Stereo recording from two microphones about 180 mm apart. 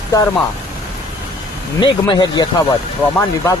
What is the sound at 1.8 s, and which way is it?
Speech, 25° left (ahead or behind).